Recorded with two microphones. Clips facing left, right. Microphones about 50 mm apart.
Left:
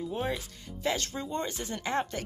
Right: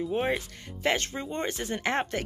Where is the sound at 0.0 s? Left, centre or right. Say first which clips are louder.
Right 5 dB; right.